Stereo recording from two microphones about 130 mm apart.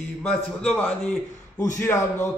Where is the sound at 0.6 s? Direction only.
5° left (ahead or behind).